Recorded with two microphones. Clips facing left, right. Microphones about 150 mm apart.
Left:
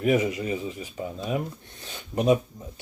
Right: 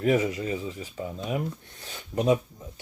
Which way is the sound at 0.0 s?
15° left (ahead or behind).